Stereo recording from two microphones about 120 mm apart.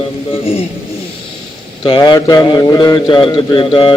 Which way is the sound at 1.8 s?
40° left (ahead or behind).